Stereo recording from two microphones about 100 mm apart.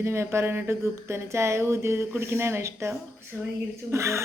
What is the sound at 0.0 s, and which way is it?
A woman's voice, 25° right (ahead or behind).